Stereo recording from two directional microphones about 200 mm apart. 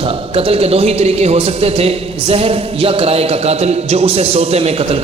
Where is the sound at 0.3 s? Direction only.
30° right (ahead or behind).